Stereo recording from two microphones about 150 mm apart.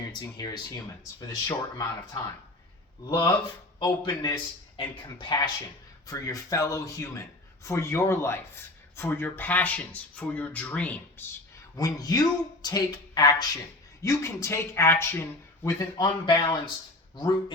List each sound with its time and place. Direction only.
0.0 s speech: 25° left (ahead or behind); by 11.0 s 10° left (ahead or behind)
11.8 s speech: 25° left (ahead or behind)